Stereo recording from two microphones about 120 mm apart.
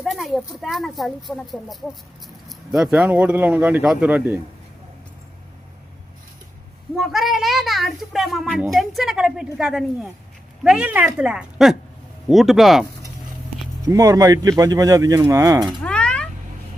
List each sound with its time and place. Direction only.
0.0 s a child's voice: centre (ahead or behind)
6.9 s a child's voice: centre (ahead or behind)
13.8 s speech: 30° right (ahead or behind)
15.8 s cat: 10° left (ahead or behind)